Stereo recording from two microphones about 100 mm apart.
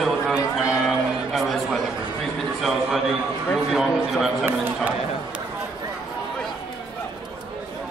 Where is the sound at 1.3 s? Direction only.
Centre (ahead or behind).